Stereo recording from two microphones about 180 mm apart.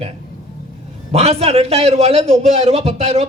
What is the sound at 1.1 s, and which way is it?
A man's voice, 35° right (ahead or behind).